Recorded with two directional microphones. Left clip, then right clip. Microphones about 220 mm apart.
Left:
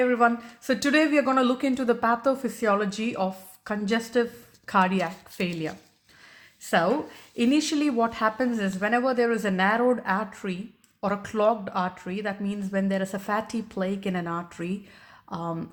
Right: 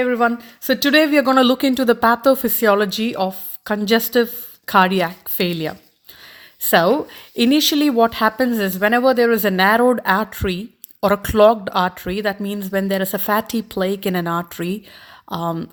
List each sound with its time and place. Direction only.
0.0 s speech: 35° right (ahead or behind)